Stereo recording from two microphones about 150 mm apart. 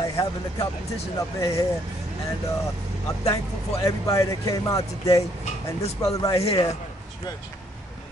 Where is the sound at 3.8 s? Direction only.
20° left (ahead or behind).